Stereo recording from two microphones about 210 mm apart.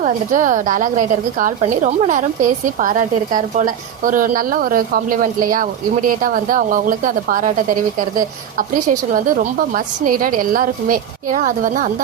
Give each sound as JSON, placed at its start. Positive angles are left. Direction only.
{"t": 0.0, "sound": "a woman's voice", "side_deg": -40}